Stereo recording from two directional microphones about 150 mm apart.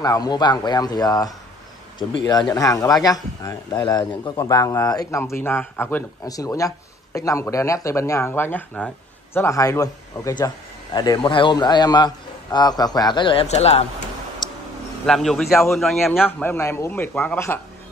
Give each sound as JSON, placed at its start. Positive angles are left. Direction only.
{"t": 0.0, "sound": "speech", "side_deg": 25}
{"t": 6.2, "sound": "speech", "side_deg": 25}
{"t": 14.4, "sound": "a sound", "side_deg": 30}
{"t": 15.0, "sound": "a man's voice", "side_deg": 5}
{"t": 16.1, "sound": "a man's voice", "side_deg": 15}